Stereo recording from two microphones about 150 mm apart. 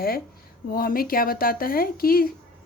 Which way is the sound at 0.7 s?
75° left (ahead or behind).